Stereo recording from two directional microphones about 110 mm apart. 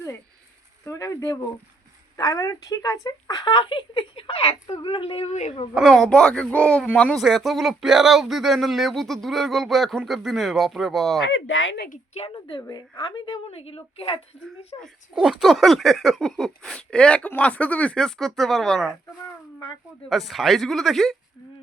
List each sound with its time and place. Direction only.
0.9 s speech: 30° left (ahead or behind); by 5.6 s 75° left (ahead or behind)
5.7 s speech: centre (ahead or behind)
7.2 s speech: centre (ahead or behind)
12.3 s a woman's voice: 50° left (ahead or behind)
15.1 s speech: 5° right (ahead or behind)
20.1 s speech: centre (ahead or behind)